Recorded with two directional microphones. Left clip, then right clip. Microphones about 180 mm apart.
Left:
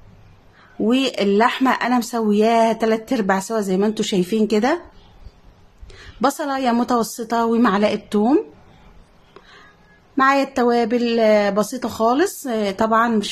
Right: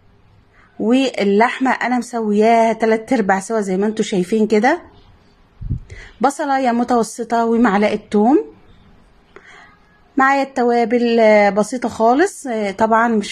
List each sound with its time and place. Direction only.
0.8 s speech: 10° right (ahead or behind)
5.9 s speech: 10° right (ahead or behind)
10.2 s speech: 15° right (ahead or behind)